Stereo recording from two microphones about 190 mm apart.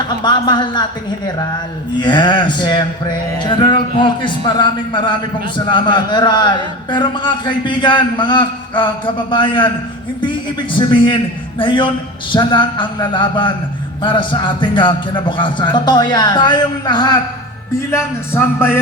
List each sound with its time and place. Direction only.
0.0 s a man's voice: 25° left (ahead or behind)
10.8 s a man's voice: 25° left (ahead or behind)
17.9 s speech: 10° left (ahead or behind)